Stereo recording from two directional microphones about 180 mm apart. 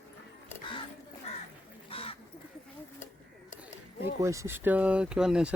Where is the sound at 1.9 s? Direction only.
30° left (ahead or behind).